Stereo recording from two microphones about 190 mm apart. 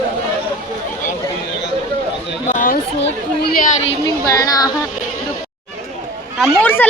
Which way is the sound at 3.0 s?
50° left (ahead or behind).